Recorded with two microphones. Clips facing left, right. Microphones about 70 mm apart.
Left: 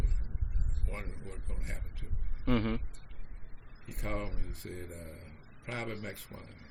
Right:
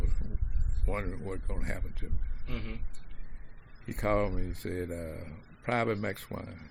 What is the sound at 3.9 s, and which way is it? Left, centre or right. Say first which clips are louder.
Speech: right 10 dB; right.